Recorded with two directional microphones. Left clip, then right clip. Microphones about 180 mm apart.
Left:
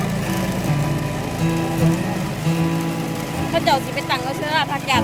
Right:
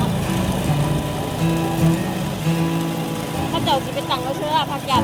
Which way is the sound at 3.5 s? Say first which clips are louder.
Left 3 dB; 20° left (ahead or behind).